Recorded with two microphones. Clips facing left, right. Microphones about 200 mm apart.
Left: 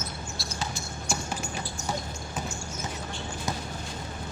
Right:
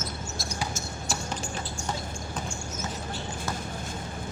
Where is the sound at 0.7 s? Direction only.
35° right (ahead or behind).